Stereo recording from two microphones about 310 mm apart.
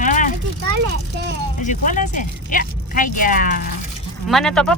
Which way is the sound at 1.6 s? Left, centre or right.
Left.